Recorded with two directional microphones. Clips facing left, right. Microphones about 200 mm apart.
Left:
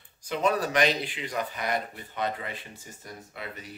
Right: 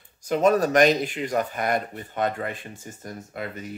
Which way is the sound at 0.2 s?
45° right (ahead or behind).